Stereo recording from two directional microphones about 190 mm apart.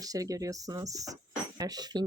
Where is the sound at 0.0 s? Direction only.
20° right (ahead or behind).